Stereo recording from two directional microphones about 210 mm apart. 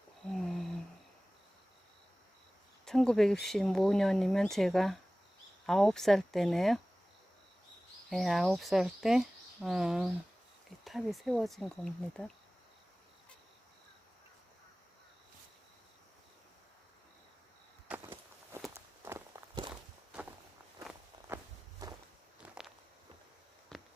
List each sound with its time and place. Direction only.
0.3 s a sound: centre (ahead or behind)
2.8 s speech: 5° left (ahead or behind)
8.1 s speech: centre (ahead or behind)
17.8 s walk: 10° right (ahead or behind)
21.8 s walk: 20° right (ahead or behind)
22.4 s walk: centre (ahead or behind)
23.7 s a sound: centre (ahead or behind)